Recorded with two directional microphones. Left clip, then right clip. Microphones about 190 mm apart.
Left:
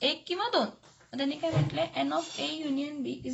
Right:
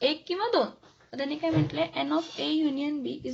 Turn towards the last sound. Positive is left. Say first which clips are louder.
# right 4 dB
turn(degrees=-30)  # may be behind; listen again after turning